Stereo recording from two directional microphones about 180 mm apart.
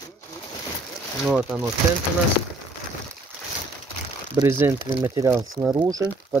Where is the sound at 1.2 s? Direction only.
5° right (ahead or behind).